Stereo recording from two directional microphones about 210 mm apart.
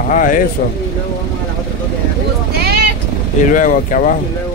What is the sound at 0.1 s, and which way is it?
Speech, 40° left (ahead or behind).